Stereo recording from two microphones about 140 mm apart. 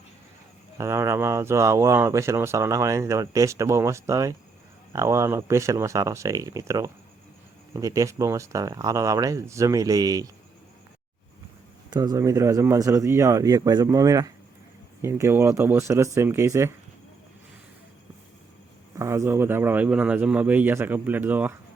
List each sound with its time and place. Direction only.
0.8 s speech: 20° right (ahead or behind)
11.9 s speech: 25° right (ahead or behind)
18.9 s speech: 20° right (ahead or behind)